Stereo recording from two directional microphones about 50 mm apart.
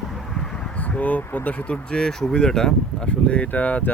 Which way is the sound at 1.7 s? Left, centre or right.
Centre.